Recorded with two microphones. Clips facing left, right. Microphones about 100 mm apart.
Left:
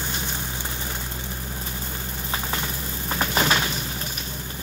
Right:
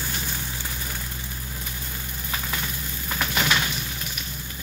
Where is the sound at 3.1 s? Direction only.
35° left (ahead or behind).